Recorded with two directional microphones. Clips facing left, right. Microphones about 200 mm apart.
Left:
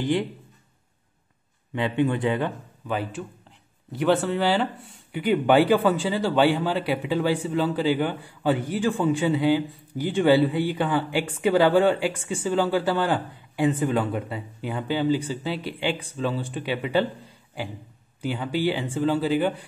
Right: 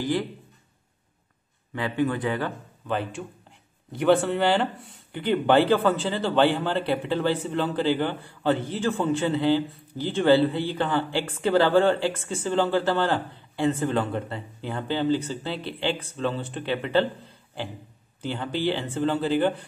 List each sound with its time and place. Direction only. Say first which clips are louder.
0.0 s speech: left 2 dB; 20° left (ahead or behind)
1.7 s speech: left 2 dB; 20° left (ahead or behind)
2.9 s a man's voice: even; 5° left (ahead or behind)
18.2 s a man's voice: left 2 dB; 10° left (ahead or behind)